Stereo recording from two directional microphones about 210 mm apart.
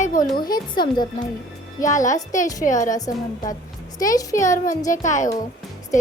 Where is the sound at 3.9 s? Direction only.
15° left (ahead or behind).